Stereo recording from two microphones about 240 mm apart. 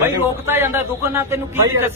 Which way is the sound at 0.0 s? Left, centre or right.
Centre.